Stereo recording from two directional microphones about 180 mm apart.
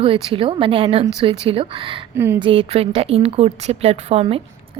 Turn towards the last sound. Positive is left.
turn(degrees=-35)  # may be behind; listen again after turning